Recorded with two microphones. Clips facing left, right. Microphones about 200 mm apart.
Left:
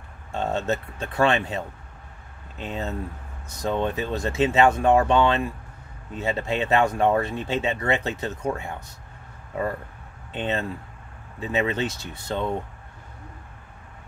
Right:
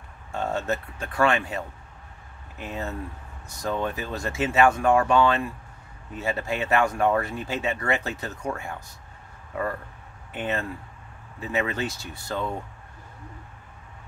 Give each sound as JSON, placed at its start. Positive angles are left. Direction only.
{"t": 0.3, "sound": "speech", "side_deg": 20}
{"t": 10.3, "sound": "speech", "side_deg": 20}